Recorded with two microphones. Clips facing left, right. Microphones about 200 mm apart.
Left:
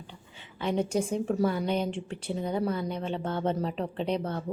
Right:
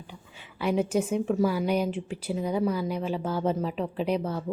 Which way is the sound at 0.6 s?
5° right (ahead or behind).